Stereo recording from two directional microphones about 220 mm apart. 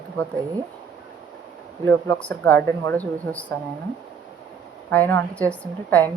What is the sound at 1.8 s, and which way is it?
Speech, 5° left (ahead or behind).